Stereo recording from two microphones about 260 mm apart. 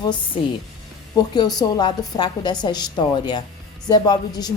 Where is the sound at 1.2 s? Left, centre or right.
Centre.